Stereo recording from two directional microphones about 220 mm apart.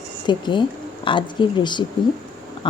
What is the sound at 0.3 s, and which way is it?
A woman's voice, 20° left (ahead or behind).